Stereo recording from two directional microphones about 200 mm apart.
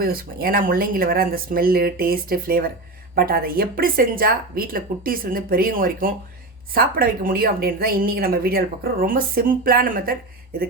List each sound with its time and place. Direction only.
0.0 s speech: 45° right (ahead or behind)